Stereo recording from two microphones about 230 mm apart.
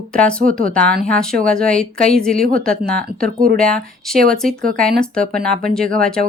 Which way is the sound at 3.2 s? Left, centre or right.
Right.